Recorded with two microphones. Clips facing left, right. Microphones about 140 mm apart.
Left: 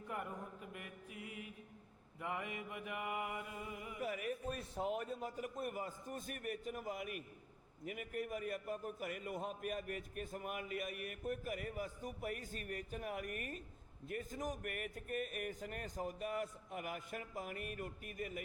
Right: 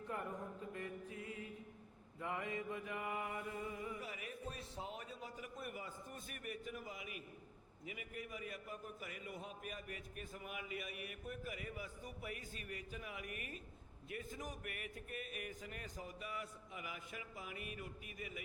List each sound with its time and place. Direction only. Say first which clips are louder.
0.7 s mantra: right 4 dB; 15° left (ahead or behind)
4.0 s a man's voice: left 7 dB; 50° left (ahead or behind)